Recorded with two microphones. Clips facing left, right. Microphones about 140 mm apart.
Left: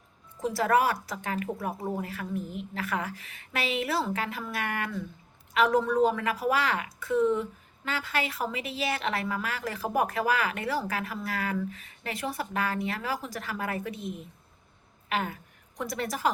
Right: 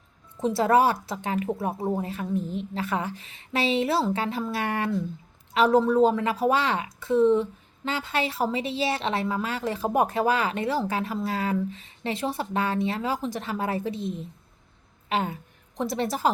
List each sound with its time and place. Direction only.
0.4 s a woman's voice: 25° right (ahead or behind)